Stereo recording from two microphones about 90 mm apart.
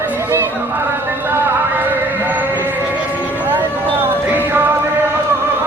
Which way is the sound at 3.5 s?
20° right (ahead or behind).